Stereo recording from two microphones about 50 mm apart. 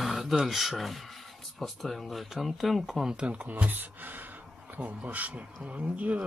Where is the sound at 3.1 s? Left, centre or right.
Right.